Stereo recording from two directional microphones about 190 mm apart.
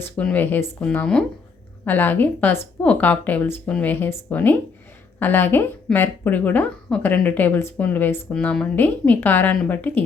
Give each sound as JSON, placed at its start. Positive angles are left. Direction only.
{"t": 0.0, "sound": "speech", "side_deg": 10}